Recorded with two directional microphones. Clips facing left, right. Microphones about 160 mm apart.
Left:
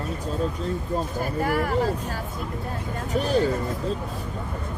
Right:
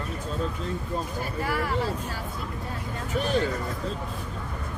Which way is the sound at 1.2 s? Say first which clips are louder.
Left 6 dB; 45° left (ahead or behind).